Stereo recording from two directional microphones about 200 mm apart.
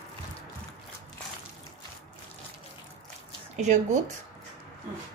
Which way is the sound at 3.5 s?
35° right (ahead or behind).